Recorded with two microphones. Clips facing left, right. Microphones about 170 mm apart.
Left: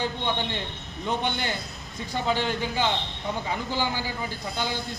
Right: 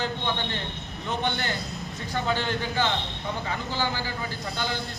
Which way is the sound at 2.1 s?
10° left (ahead or behind).